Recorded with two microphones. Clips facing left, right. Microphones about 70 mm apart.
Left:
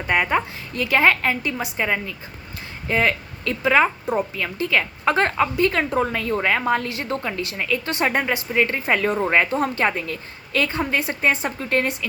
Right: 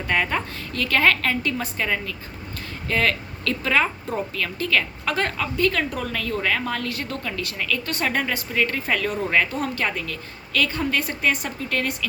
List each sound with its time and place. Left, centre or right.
0.1 s a woman's voice: centre